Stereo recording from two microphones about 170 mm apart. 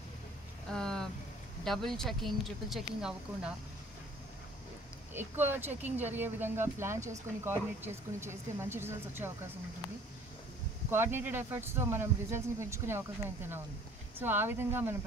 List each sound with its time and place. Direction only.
0.7 s a sound: 5° left (ahead or behind)
1.6 s speech: centre (ahead or behind)
5.1 s speech: 10° right (ahead or behind)
10.9 s speech: 15° right (ahead or behind)